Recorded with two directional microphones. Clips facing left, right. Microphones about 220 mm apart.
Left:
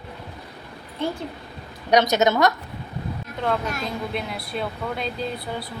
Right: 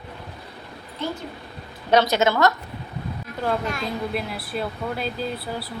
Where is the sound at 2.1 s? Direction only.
20° left (ahead or behind).